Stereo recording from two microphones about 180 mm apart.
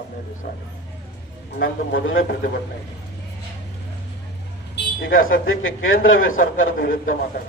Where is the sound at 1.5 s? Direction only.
60° left (ahead or behind).